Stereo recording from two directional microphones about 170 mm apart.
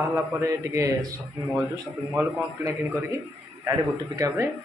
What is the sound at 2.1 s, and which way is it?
A man's voice, 10° right (ahead or behind).